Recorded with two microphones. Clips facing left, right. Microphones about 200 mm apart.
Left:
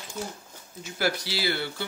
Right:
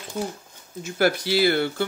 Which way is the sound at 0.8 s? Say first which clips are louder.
Right 7 dB; 50° right (ahead or behind).